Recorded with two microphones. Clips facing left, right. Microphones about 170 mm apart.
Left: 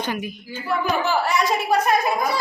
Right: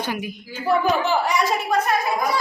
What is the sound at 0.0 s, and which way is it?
A woman's voice, 10° right (ahead or behind).